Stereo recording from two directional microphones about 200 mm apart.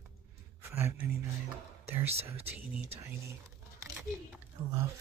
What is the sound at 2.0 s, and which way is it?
Speech, 30° right (ahead or behind).